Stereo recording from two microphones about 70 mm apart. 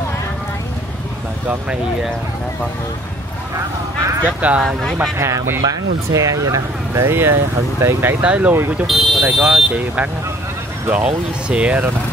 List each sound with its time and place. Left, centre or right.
4.2 s speech: right
5.1 s speech: right
5.6 s speech: right
7.1 s speech: right
8.2 s speech: centre
8.8 s speech: centre
10.9 s speech: centre